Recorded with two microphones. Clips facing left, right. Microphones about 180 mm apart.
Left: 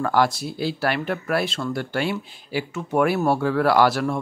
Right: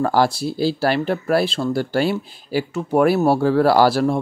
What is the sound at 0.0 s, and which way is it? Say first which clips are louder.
Speech: right 3 dB; 30° right (ahead or behind).